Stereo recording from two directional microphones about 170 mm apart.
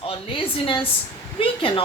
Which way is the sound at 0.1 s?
35° left (ahead or behind).